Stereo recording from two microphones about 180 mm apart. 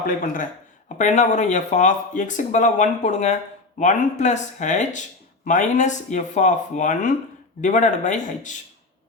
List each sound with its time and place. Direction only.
0.0 s speech: 45° left (ahead or behind)